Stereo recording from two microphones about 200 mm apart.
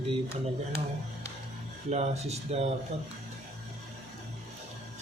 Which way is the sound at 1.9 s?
35° right (ahead or behind).